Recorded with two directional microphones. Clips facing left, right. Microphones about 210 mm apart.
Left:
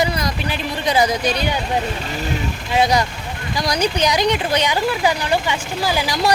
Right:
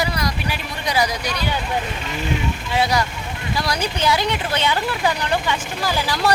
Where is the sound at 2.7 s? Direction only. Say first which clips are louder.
Left 4 dB; 20° left (ahead or behind).